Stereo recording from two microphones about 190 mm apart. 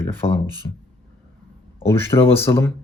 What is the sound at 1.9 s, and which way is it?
Speech, 15° left (ahead or behind).